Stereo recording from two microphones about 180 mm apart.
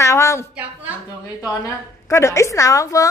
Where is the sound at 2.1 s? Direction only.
15° left (ahead or behind).